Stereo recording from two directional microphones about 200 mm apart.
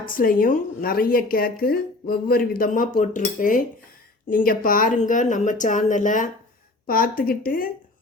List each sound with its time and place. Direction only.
0.1 s a woman's voice: 45° left (ahead or behind)